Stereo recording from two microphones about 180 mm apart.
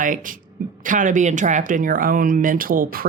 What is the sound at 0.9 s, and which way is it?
Speech, 45° right (ahead or behind).